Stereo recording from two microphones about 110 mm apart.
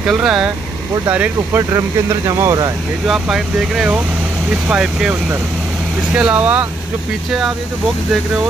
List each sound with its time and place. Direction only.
0.0 s speech: 5° right (ahead or behind); by 2.7 s 35° right (ahead or behind)
3.1 s speech: 5° right (ahead or behind)
6.1 s speech: 10° right (ahead or behind)
7.2 s speech: 5° right (ahead or behind)